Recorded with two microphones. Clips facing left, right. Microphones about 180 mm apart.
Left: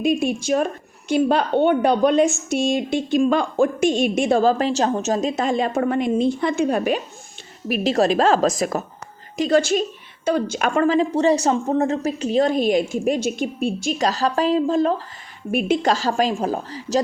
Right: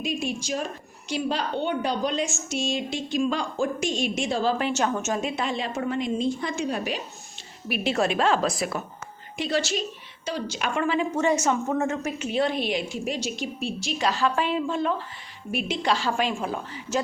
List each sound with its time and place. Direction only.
0.0 s a woman's voice: 55° left (ahead or behind)
7.7 s a woman's voice: 40° left (ahead or behind)
15.5 s a woman's voice: 50° left (ahead or behind)